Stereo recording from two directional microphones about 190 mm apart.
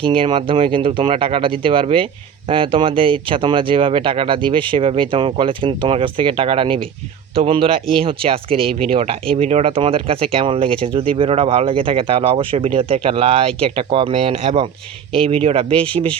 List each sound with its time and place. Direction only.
0.0 s speech: 25° right (ahead or behind)